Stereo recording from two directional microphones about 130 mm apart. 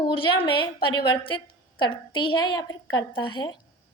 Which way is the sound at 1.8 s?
35° left (ahead or behind).